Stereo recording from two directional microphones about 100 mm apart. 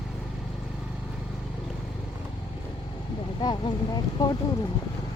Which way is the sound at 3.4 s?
45° left (ahead or behind).